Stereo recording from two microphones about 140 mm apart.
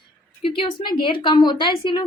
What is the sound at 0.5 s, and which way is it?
A woman's voice, 40° left (ahead or behind).